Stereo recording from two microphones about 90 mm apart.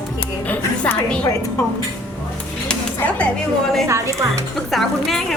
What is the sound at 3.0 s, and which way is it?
Speech, 15° left (ahead or behind).